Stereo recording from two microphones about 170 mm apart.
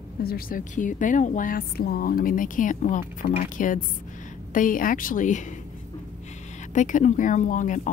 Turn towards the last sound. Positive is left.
turn(degrees=50)  # may be behind; listen again after turning